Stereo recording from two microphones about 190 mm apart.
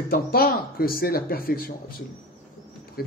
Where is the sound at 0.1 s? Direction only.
55° left (ahead or behind).